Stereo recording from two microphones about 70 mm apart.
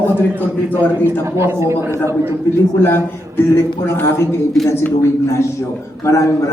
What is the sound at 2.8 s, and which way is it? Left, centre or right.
A man's voice, left.